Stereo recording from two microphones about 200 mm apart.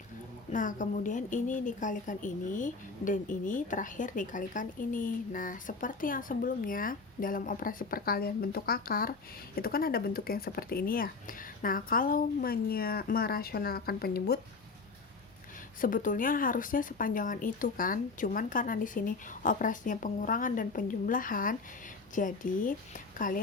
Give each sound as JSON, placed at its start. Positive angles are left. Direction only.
{"t": 0.5, "sound": "a woman's voice", "side_deg": 40}
{"t": 15.8, "sound": "a woman's voice", "side_deg": 40}